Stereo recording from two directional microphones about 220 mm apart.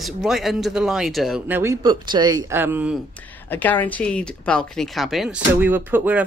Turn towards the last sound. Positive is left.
turn(degrees=-10)  # may be behind; listen again after turning